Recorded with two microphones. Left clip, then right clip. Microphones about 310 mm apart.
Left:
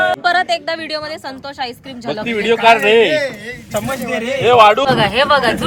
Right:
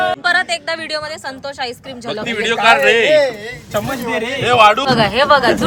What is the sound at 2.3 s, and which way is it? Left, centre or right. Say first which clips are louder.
Speech: left 1 dB; centre.